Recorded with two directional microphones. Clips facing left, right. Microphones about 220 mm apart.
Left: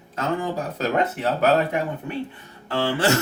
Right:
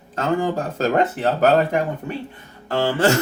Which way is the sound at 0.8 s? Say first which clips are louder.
Right 4 dB; 45° right (ahead or behind).